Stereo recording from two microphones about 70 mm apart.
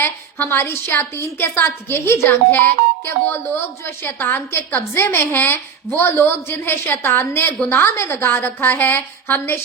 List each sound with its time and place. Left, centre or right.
0.3 s speech: left
2.5 s speech: left